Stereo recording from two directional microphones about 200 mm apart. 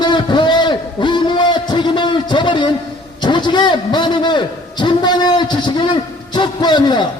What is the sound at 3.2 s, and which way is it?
A man's voice, 25° left (ahead or behind).